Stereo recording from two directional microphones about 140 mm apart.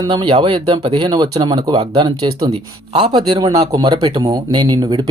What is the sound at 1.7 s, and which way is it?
Speech, 45° right (ahead or behind).